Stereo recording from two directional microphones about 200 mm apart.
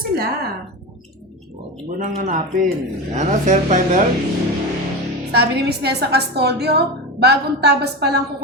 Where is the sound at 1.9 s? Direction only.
40° right (ahead or behind).